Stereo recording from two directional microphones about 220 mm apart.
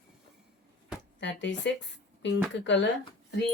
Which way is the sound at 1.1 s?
55° left (ahead or behind).